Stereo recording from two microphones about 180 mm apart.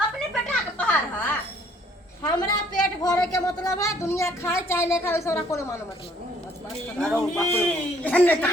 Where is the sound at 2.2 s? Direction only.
20° left (ahead or behind).